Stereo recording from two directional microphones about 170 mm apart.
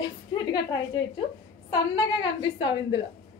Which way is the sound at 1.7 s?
25° left (ahead or behind).